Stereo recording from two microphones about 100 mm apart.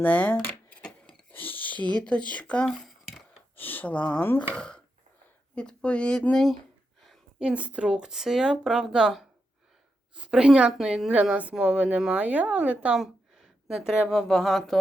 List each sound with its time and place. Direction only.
0.0 s speech: 15° left (ahead or behind)
0.4 s keys jangling: 15° left (ahead or behind)
1.3 s whispering: 20° left (ahead or behind)
2.0 s speech: 10° left (ahead or behind)
2.6 s a sound: centre (ahead or behind)
3.5 s speech: 20° left (ahead or behind)
7.3 s speech: 10° right (ahead or behind)
13.0 s speech: 5° right (ahead or behind)